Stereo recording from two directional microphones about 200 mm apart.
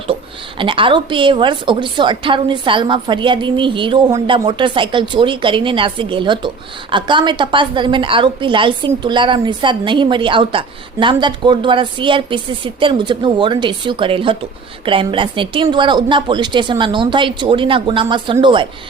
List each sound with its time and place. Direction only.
0.6 s a woman's voice: 25° right (ahead or behind)